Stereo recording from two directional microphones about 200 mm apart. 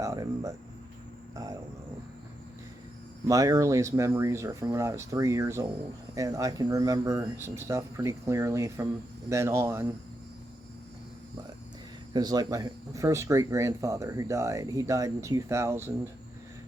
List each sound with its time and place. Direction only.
0.0 s a sound: 15° right (ahead or behind)
3.2 s speech: 15° right (ahead or behind)
12.1 s speech: 20° right (ahead or behind)